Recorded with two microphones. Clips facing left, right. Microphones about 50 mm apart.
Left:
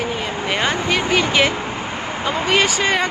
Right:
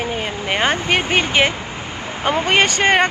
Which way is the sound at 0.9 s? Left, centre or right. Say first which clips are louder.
Even; right.